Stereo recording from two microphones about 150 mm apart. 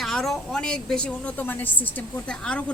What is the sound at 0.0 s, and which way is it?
A woman's voice, centre (ahead or behind).